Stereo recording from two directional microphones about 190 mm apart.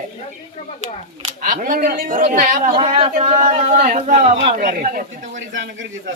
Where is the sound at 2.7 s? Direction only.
25° right (ahead or behind).